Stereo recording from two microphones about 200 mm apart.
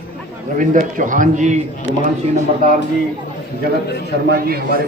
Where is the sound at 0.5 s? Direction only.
40° right (ahead or behind).